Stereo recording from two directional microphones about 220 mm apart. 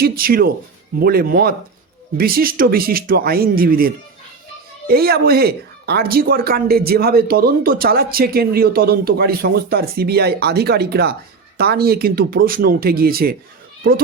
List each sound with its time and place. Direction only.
0.0 s speech: 40° right (ahead or behind)